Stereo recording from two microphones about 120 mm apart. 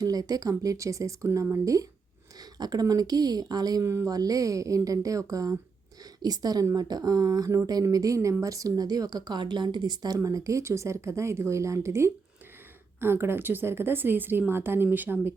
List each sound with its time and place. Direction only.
0.0 s a woman's voice: 30° right (ahead or behind); by 15.3 s 15° right (ahead or behind)